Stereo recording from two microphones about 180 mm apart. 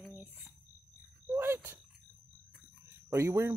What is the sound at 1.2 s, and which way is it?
Speech, 10° right (ahead or behind).